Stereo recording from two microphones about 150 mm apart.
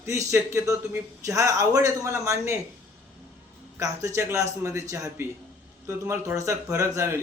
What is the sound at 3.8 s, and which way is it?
A man's voice, 20° right (ahead or behind).